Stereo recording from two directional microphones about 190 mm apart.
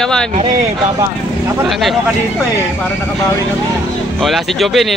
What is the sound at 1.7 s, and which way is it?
Speech, centre (ahead or behind).